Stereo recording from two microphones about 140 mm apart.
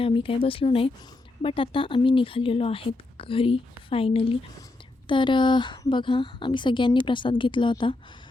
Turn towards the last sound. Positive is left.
turn(degrees=35)  # may be behind; listen again after turning